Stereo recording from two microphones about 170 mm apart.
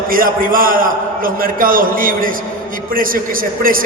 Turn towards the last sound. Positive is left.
turn(degrees=-55)  # may be behind; listen again after turning